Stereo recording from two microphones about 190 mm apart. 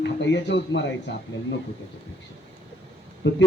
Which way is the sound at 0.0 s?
70° left (ahead or behind).